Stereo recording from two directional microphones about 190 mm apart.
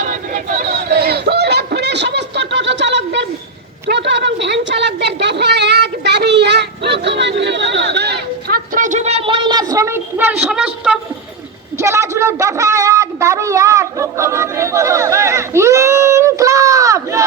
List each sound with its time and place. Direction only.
0.0 s a sound: 40° right (ahead or behind); by 3.2 s 70° right (ahead or behind)
3.8 s a woman's voice: 65° right (ahead or behind); by 10.7 s 5° right (ahead or behind)
11.8 s speech: 15° right (ahead or behind)